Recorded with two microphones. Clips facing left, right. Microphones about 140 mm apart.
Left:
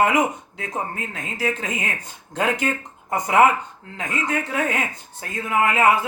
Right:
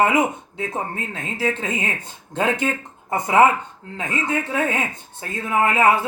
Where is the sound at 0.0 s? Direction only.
25° right (ahead or behind).